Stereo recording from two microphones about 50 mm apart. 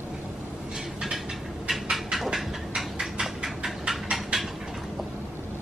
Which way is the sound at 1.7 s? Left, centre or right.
Centre.